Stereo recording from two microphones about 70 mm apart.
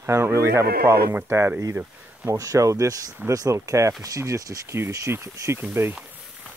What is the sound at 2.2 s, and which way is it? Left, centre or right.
Speech, right.